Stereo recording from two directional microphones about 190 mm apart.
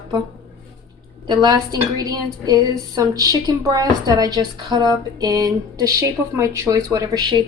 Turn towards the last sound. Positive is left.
turn(degrees=-20)  # may be behind; listen again after turning